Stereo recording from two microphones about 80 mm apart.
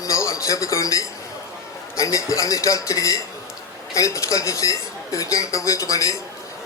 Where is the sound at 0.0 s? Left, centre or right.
Left.